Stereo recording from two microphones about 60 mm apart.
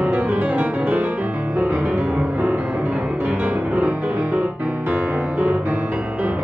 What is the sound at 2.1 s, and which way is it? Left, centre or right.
Music, right.